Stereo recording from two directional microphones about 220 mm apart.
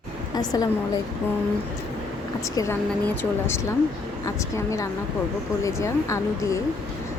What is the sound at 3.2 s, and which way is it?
A woman's voice, 10° left (ahead or behind).